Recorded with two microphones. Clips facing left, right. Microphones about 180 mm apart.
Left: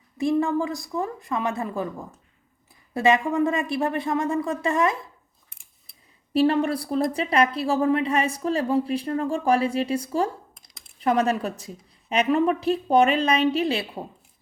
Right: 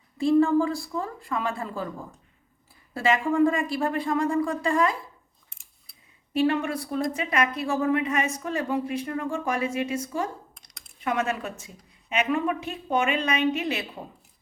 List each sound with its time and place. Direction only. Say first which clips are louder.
0.2 s a woman's voice: right 2 dB; 15° left (ahead or behind)
2.9 s a woman's voice: left 3 dB; 20° left (ahead or behind)
6.3 s a woman's voice: left 4 dB; 35° left (ahead or behind)
10.5 s a sound: left 1 dB; centre (ahead or behind)
11.0 s a woman's voice: left 5 dB; 35° left (ahead or behind)